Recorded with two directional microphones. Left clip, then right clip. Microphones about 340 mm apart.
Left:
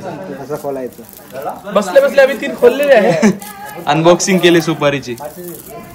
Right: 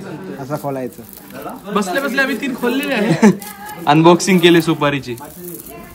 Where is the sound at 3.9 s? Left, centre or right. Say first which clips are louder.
Even; centre.